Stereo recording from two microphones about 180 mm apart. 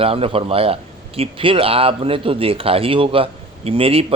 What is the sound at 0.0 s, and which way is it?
A man's voice, 30° right (ahead or behind).